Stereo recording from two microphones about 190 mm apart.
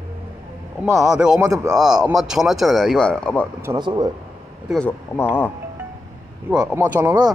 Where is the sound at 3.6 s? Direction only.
20° right (ahead or behind).